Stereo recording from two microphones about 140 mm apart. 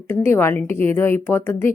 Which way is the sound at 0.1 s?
15° left (ahead or behind).